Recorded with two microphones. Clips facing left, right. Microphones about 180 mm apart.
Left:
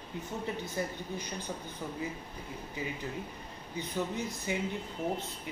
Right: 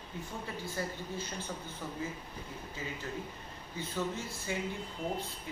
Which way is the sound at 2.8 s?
15° left (ahead or behind).